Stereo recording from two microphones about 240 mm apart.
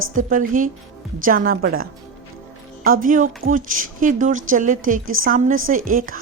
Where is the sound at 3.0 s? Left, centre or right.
Right.